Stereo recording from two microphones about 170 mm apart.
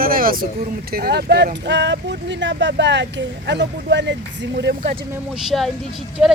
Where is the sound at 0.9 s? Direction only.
65° right (ahead or behind); by 4.8 s 85° right.